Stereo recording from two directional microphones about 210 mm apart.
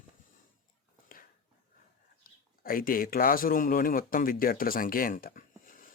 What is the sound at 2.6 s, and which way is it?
Speech, 45° left (ahead or behind).